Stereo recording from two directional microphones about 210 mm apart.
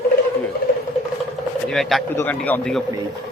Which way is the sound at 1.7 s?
Centre (ahead or behind).